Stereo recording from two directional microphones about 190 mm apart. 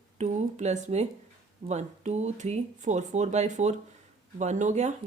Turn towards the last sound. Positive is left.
turn(degrees=-40)  # may be behind; listen again after turning